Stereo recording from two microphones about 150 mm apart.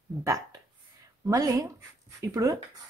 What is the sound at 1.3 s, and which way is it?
Speech, 20° right (ahead or behind).